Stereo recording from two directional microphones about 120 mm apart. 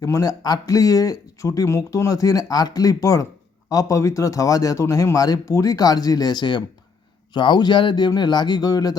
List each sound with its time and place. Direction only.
0.0 s a man's voice: 30° left (ahead or behind)